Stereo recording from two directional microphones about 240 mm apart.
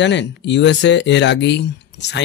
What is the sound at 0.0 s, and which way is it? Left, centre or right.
Speech, left.